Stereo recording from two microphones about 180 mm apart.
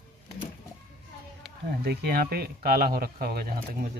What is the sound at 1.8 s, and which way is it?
Speech, 60° right (ahead or behind).